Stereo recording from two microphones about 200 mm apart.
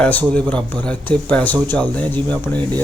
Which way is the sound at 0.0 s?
5° left (ahead or behind).